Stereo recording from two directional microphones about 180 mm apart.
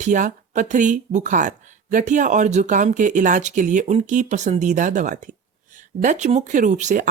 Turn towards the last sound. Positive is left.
turn(degrees=-45)  # may be behind; listen again after turning